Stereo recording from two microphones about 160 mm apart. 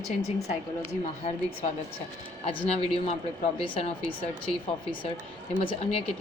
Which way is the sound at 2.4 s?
35° left (ahead or behind).